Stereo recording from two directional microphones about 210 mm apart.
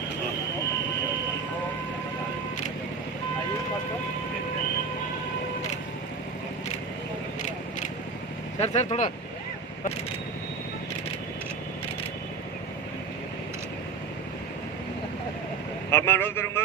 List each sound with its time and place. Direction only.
8.5 s speech: 30° left (ahead or behind)
15.9 s a man's voice: 10° left (ahead or behind)